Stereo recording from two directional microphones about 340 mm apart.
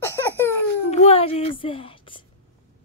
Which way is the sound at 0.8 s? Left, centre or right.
Centre.